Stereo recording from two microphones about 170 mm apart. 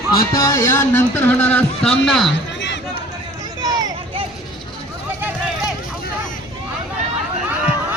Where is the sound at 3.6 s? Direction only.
20° right (ahead or behind).